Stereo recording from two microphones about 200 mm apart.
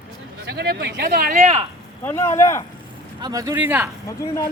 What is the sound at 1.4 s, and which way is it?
Speech, 30° right (ahead or behind).